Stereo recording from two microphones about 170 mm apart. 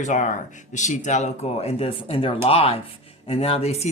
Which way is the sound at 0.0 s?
45° left (ahead or behind).